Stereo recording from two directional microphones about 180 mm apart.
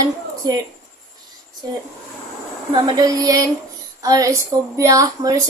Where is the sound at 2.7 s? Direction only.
25° right (ahead or behind).